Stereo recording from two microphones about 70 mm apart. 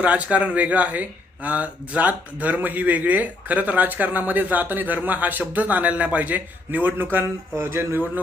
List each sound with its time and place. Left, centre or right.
0.0 s speech: centre